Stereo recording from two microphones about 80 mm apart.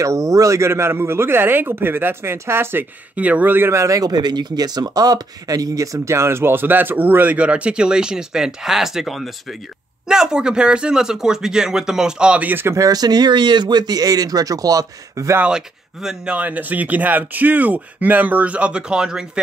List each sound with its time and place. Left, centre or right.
0.0 s speech: right
12.7 s speech: right
15.5 s speech: centre
16.3 s speech: right